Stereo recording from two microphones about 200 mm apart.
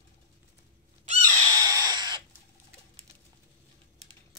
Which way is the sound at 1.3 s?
20° right (ahead or behind).